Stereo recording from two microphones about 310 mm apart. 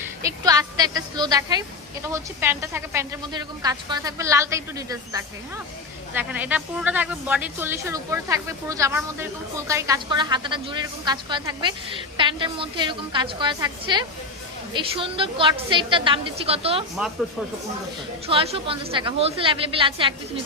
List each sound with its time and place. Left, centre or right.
0.2 s a woman's voice: centre
18.3 s a woman's voice: centre